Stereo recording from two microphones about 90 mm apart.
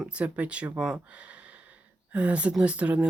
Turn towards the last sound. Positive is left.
turn(degrees=-15)  # may be behind; listen again after turning